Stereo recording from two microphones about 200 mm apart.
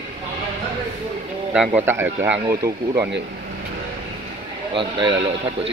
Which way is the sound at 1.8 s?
10° right (ahead or behind).